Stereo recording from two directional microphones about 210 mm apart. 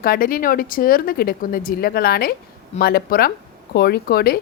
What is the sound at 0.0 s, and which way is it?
A woman's voice, 45° left (ahead or behind).